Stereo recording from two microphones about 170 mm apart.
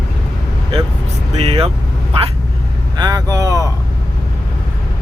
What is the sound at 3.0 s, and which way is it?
Speech, 20° right (ahead or behind).